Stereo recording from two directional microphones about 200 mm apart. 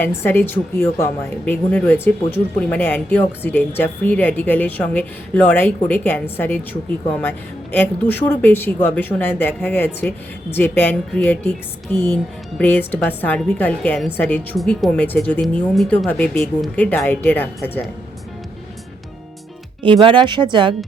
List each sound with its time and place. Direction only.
0.0 s a woman's voice: 10° left (ahead or behind)
19.8 s speech: 25° right (ahead or behind)